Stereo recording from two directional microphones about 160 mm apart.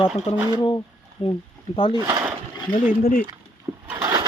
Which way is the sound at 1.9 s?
20° right (ahead or behind).